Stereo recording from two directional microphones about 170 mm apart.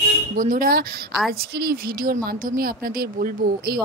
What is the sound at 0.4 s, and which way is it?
Speech, 55° right (ahead or behind).